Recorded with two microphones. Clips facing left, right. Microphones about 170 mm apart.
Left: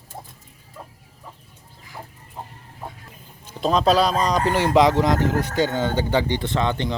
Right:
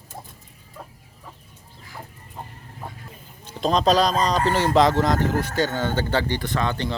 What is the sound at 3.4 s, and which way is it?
Speech, 5° left (ahead or behind).